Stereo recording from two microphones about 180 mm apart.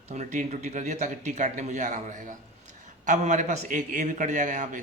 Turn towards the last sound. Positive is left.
turn(degrees=-45)  # may be behind; listen again after turning